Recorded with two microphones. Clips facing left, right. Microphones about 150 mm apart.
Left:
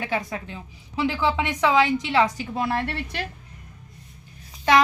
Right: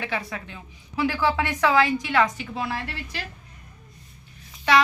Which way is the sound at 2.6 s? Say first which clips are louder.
Left 5 dB; 55° left (ahead or behind).